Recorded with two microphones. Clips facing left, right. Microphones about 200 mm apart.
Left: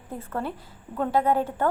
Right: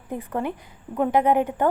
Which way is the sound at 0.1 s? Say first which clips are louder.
Right 4 dB; 15° right (ahead or behind).